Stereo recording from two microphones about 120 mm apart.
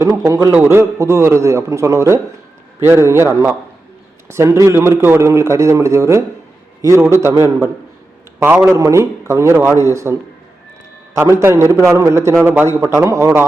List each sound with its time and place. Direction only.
0.0 s a man's voice: 25° right (ahead or behind)
8.7 s a man's voice: 25° right (ahead or behind)